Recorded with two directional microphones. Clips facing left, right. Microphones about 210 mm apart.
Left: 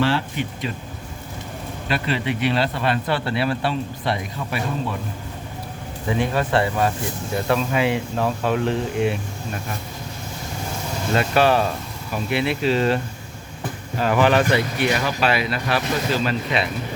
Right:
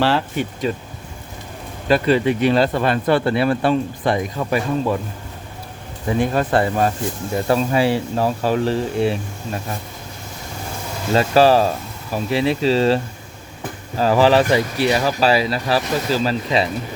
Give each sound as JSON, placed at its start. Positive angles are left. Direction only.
{"t": 0.0, "sound": "speech", "side_deg": -40}
{"t": 1.9, "sound": "speech", "side_deg": -40}
{"t": 6.1, "sound": "speech", "side_deg": -45}
{"t": 11.1, "sound": "speech", "side_deg": -35}
{"t": 14.0, "sound": "speech", "side_deg": -35}